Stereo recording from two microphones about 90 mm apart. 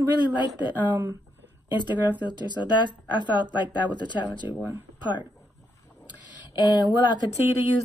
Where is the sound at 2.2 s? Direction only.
55° left (ahead or behind).